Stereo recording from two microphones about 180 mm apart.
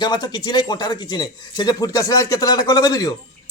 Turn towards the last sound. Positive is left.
turn(degrees=20)  # may be behind; listen again after turning